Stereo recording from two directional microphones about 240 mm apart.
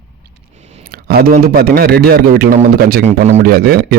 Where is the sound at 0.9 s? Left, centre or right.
Right.